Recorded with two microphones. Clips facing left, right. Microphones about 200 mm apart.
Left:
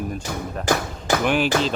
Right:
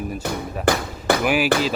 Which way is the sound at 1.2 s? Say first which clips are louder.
Left 1 dB; 5° right (ahead or behind).